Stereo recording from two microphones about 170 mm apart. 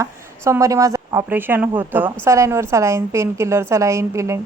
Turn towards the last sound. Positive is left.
turn(degrees=-15)  # may be behind; listen again after turning